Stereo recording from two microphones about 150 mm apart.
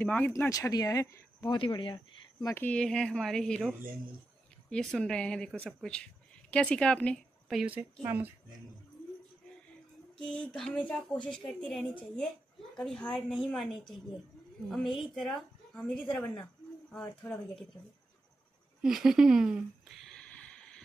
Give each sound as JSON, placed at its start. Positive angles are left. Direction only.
{"t": 0.0, "sound": "a woman's voice", "side_deg": 10}
{"t": 0.3, "sound": "speech", "side_deg": 20}
{"t": 1.5, "sound": "speech", "side_deg": 30}
{"t": 2.4, "sound": "a woman's voice", "side_deg": 15}
{"t": 10.1, "sound": "a woman's voice", "side_deg": 5}
{"t": 14.7, "sound": "a woman's voice", "side_deg": 0}
{"t": 18.8, "sound": "speech", "side_deg": -5}
{"t": 20.1, "sound": "a sound", "side_deg": 5}